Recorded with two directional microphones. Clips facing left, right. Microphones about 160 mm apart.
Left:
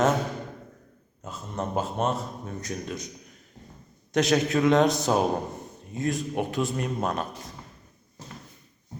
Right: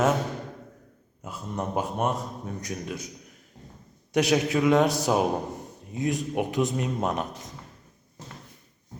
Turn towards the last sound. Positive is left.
turn(degrees=-20)  # may be behind; listen again after turning